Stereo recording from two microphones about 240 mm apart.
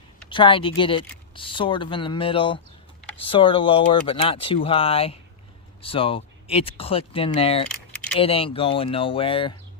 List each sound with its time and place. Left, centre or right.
0.3 s speech: left
7.7 s keys jangling: centre
8.2 s speech: left